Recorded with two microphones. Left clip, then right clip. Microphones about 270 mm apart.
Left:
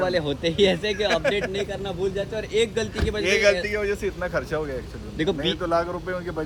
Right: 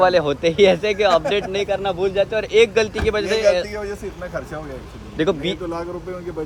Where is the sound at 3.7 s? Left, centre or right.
Centre.